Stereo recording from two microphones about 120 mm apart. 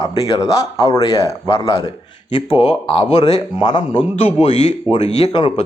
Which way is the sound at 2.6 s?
50° left (ahead or behind).